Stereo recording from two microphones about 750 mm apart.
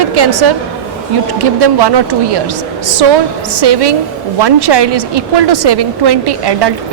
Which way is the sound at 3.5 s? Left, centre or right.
Right.